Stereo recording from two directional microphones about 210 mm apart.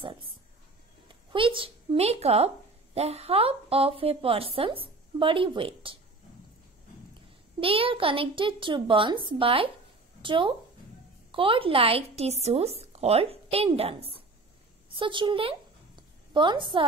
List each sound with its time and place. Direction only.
1.3 s a woman's voice: 25° right (ahead or behind)
7.6 s a woman's voice: 25° right (ahead or behind)
16.0 s a sound: 20° right (ahead or behind)